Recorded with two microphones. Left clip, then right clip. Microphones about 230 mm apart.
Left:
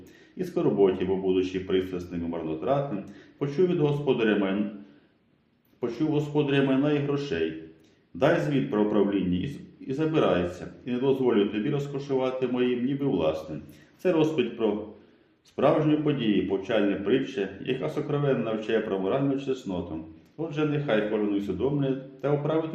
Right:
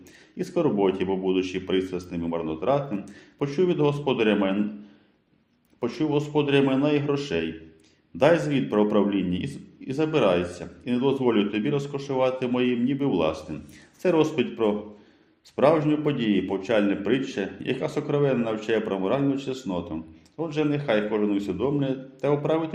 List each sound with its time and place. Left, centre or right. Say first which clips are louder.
0.3 s a man's voice: even; right
5.8 s a man's voice: right 2 dB; right